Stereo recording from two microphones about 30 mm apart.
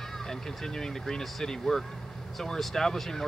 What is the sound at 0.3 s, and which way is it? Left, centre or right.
Speech, centre.